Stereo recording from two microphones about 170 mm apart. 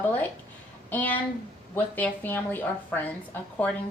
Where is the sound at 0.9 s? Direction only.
10° left (ahead or behind).